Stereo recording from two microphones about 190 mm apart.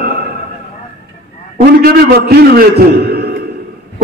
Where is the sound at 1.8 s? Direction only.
55° right (ahead or behind).